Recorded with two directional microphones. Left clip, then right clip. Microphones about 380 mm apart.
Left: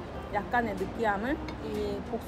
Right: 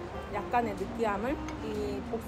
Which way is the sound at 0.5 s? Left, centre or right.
Centre.